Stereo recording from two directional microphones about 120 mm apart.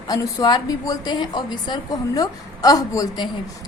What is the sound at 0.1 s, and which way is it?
A woman's voice, 35° left (ahead or behind).